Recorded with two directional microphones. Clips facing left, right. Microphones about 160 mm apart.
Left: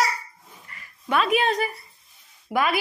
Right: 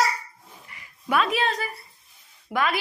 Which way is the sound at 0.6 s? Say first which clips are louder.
Right 1 dB; 15° right (ahead or behind).